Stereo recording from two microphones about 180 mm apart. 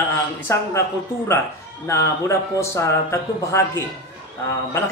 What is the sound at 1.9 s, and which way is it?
A man's voice, 15° left (ahead or behind).